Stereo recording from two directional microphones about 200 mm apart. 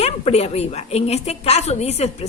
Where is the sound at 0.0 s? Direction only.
30° left (ahead or behind).